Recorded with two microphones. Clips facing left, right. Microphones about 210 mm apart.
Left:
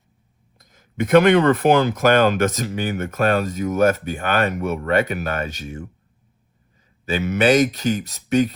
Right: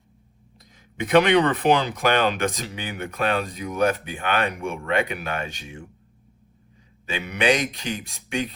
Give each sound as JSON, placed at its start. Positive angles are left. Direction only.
{"t": 0.6, "sound": "speech", "side_deg": 50}
{"t": 7.0, "sound": "speech", "side_deg": 40}